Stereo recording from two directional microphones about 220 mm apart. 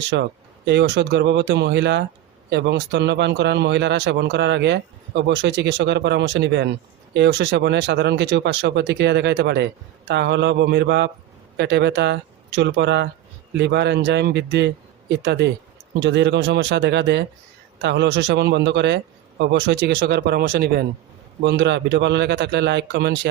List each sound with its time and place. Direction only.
0.1 s speech: 55° right (ahead or behind)